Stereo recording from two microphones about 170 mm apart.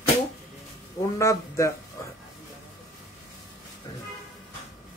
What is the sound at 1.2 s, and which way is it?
Speech, 20° left (ahead or behind).